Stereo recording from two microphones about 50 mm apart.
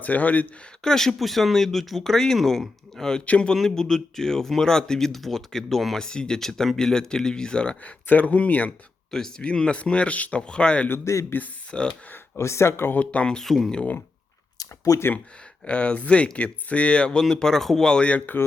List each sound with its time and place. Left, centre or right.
0.0 s speech: left
0.9 s speech: centre
3.2 s speech: left
3.5 s speech: centre
6.1 s speech: centre
8.0 s speech: left
9.4 s speech: centre
11.0 s speech: left
11.7 s speech: centre
12.4 s speech: left
12.9 s speech: left
13.3 s speech: centre
15.6 s speech: left
18.0 s speech: left